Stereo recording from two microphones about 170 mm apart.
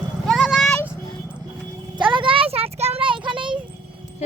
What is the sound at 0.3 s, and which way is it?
Vehicle, centre (ahead or behind).